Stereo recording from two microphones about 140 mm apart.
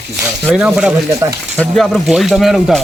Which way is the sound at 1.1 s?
20° right (ahead or behind).